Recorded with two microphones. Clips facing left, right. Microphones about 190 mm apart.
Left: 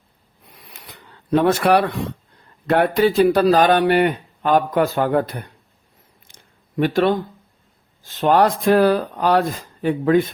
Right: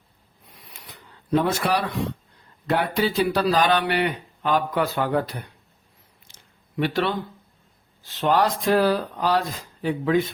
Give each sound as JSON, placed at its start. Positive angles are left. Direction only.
{"t": 1.3, "sound": "speech", "side_deg": 65}
{"t": 6.2, "sound": "a sound", "side_deg": 50}
{"t": 8.0, "sound": "speech", "side_deg": 50}